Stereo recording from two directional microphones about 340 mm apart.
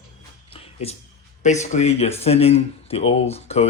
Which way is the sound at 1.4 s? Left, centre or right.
Left.